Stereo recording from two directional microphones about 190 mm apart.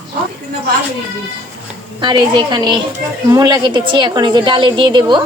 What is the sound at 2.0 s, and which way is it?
A woman's voice, 25° right (ahead or behind).